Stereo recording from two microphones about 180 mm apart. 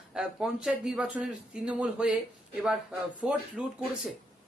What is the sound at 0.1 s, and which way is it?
A man's voice, 5° right (ahead or behind).